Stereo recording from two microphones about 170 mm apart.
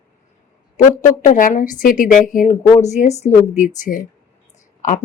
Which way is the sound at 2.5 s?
40° left (ahead or behind).